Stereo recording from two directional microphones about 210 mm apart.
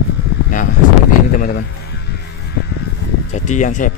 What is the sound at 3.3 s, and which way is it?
Speech, 35° left (ahead or behind).